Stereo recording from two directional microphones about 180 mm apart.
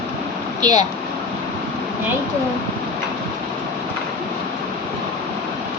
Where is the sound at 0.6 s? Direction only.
20° right (ahead or behind).